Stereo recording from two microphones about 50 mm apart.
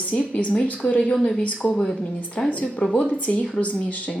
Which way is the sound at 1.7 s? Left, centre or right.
Centre.